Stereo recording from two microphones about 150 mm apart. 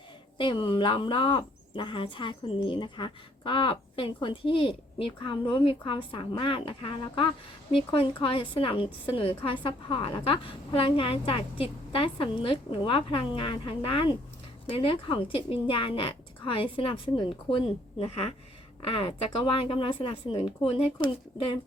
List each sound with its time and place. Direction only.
0.3 s speech: 35° left (ahead or behind)